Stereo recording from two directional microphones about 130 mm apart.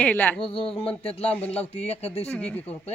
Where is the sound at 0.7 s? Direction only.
45° left (ahead or behind).